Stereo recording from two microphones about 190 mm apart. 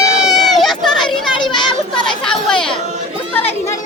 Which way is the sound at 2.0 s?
5° left (ahead or behind).